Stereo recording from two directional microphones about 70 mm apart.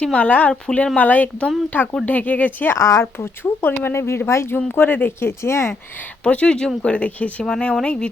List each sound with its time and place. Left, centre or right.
0.0 s speech: centre
2.7 s speech: left
6.2 s speech: centre